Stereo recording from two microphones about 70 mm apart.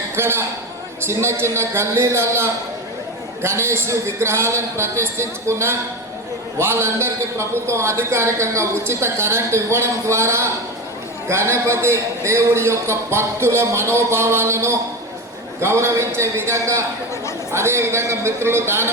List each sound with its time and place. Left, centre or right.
0.2 s a man's voice: right